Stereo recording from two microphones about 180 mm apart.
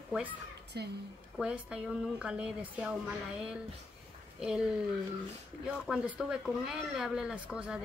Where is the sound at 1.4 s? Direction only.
5° right (ahead or behind).